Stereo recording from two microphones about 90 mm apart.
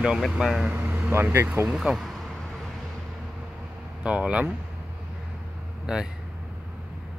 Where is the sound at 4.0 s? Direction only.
15° right (ahead or behind).